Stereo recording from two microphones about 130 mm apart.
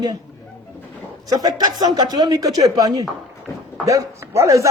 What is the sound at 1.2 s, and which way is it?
Speech, 30° right (ahead or behind).